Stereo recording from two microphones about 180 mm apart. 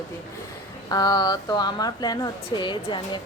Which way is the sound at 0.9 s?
20° left (ahead or behind).